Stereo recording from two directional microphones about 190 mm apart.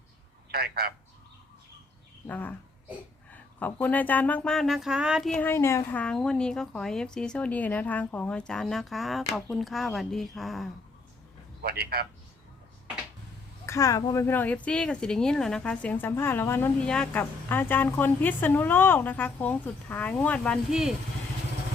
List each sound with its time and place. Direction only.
0.5 s a man's voice: 55° right (ahead or behind)
2.2 s speech: 10° left (ahead or behind)
11.6 s a man's voice: 55° right (ahead or behind)
13.7 s speech: 15° left (ahead or behind); by 20.9 s 5° right (ahead or behind)